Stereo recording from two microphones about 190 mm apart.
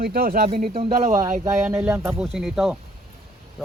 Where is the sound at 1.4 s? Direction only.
15° right (ahead or behind).